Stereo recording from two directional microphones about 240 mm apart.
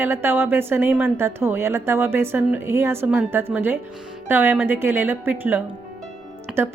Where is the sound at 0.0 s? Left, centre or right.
Centre.